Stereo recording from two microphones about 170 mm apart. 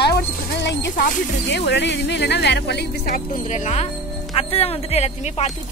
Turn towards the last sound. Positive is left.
turn(degrees=40)  # may be behind; listen again after turning